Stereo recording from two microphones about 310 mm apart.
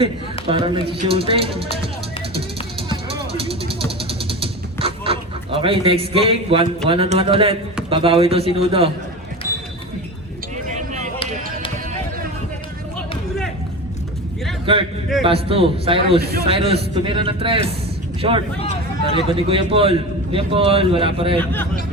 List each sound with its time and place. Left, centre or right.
0.4 s a man's voice: centre
2.3 s music: centre
6.8 s a man's voice: centre
14.7 s a man's voice: centre
18.6 s a sound: centre
19.3 s a man's voice: centre